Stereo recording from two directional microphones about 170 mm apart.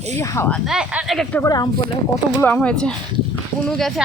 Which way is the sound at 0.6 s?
5° right (ahead or behind).